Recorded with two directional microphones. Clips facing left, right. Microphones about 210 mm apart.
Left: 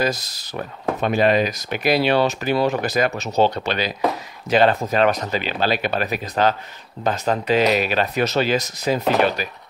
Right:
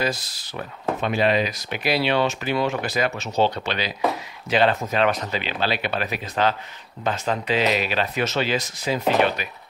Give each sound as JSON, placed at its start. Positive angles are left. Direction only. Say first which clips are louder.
{"t": 0.0, "sound": "speech", "louder": "left 3 dB", "side_deg": 40}